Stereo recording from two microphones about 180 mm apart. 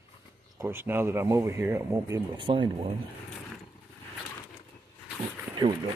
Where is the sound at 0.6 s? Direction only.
15° right (ahead or behind).